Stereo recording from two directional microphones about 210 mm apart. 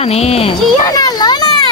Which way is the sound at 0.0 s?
30° left (ahead or behind).